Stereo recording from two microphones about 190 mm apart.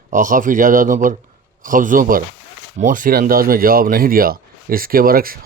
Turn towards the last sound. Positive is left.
turn(degrees=-50)  # may be behind; listen again after turning